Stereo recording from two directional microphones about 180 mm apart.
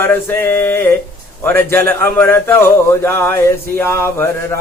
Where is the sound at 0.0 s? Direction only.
10° left (ahead or behind).